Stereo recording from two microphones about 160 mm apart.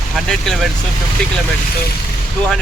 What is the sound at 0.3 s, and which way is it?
Speech, centre (ahead or behind).